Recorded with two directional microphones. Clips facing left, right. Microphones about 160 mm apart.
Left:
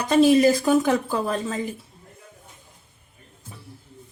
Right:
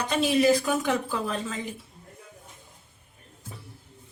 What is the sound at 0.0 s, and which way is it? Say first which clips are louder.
Speech: left 7 dB; 40° left (ahead or behind).